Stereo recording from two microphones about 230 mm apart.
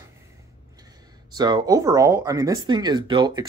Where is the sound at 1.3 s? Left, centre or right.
Centre.